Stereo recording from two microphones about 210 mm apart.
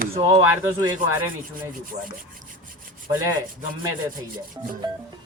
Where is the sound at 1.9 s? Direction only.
30° right (ahead or behind).